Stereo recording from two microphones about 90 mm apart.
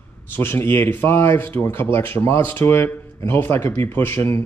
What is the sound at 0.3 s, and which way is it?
Speech, 25° left (ahead or behind).